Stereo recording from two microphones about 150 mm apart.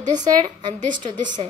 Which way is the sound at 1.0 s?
30° right (ahead or behind).